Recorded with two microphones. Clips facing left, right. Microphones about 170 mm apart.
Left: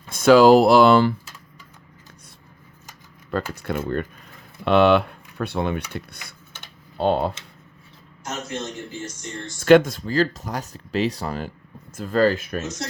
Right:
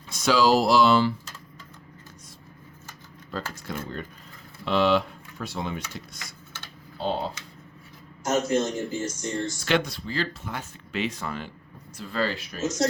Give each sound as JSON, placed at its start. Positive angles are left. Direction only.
{"t": 0.1, "sound": "speech", "side_deg": 55}
{"t": 3.5, "sound": "speech", "side_deg": 60}
{"t": 7.0, "sound": "speech", "side_deg": 60}
{"t": 8.2, "sound": "a man's voice", "side_deg": -40}
{"t": 9.6, "sound": "speech", "side_deg": 45}
{"t": 12.6, "sound": "speech", "side_deg": -40}